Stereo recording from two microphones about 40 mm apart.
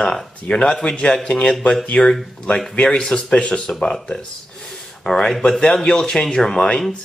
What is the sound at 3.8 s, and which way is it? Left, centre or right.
Speech, centre.